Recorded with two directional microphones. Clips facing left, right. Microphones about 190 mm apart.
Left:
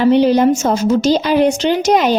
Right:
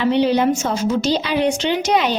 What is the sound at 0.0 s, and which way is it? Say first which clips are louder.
A woman's voice: left 5 dB; 45° left (ahead or behind).